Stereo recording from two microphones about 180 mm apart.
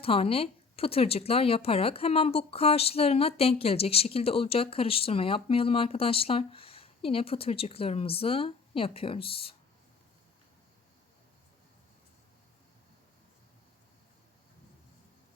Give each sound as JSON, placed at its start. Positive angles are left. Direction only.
{"t": 0.0, "sound": "speech", "side_deg": 30}